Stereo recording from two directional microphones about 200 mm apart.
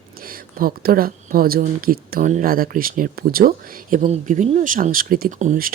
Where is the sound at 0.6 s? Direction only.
45° right (ahead or behind).